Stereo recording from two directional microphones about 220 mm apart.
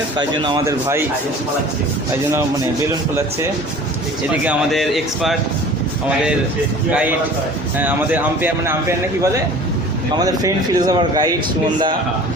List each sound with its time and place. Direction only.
0.2 s speech: 20° right (ahead or behind)
4.4 s speech: centre (ahead or behind)
7.8 s speech: 10° right (ahead or behind)